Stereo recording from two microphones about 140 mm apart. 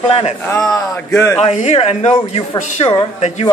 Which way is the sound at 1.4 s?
55° left (ahead or behind).